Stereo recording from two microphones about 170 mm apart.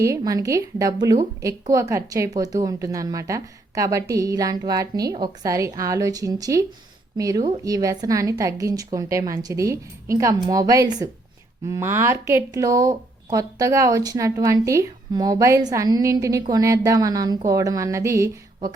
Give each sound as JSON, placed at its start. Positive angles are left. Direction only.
{"t": 0.0, "sound": "speech", "side_deg": -20}